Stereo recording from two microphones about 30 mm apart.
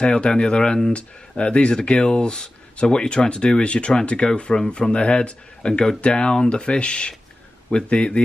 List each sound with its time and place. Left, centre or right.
0.0 s speech: left
0.9 s speech: left